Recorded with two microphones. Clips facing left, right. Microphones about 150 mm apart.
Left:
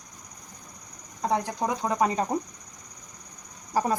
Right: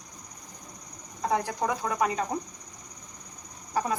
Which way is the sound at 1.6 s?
25° left (ahead or behind).